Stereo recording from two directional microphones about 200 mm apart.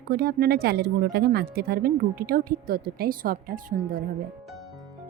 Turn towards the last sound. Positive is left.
turn(degrees=-45)  # may be behind; listen again after turning